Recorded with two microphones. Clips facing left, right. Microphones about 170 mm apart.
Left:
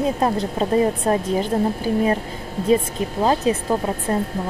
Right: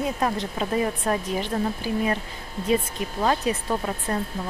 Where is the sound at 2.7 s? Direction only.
30° left (ahead or behind).